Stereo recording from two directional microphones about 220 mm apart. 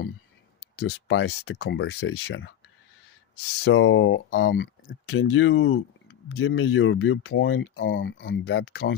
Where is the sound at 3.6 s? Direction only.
60° left (ahead or behind).